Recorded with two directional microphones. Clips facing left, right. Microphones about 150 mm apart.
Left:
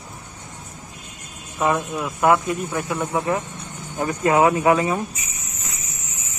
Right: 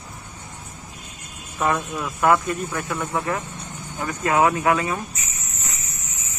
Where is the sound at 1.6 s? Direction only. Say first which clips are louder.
Left 2 dB; 10° left (ahead or behind).